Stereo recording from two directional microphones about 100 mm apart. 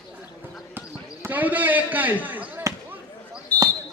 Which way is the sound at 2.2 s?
15° right (ahead or behind).